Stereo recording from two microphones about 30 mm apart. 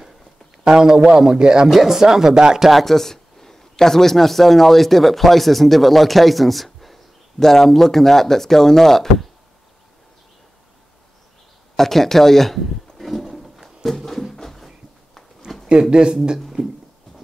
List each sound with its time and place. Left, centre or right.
0.7 s a man's voice: right
2.3 s a man's voice: right
2.7 s a man's voice: centre
11.7 s speech: centre
13.8 s a sound: centre
15.5 s a sound: centre
15.9 s speech: right